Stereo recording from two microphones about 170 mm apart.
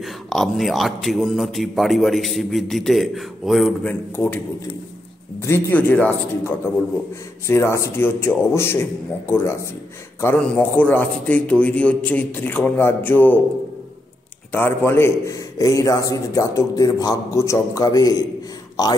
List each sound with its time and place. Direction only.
0.0 s a man's voice: centre (ahead or behind)
4.1 s a man's voice: 10° left (ahead or behind)
5.4 s a man's voice: 10° left (ahead or behind)
14.5 s a man's voice: 10° left (ahead or behind)